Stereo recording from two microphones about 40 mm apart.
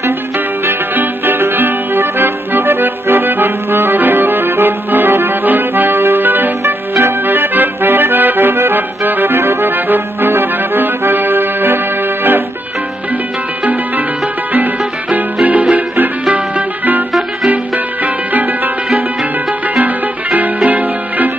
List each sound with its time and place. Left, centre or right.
0.9 s accordion: right
6.6 s music: right
7.2 s accordion: right
9.4 s music: right
10.3 s accordion: right
14.5 s music: right
18.0 s music: right
19.7 s music: right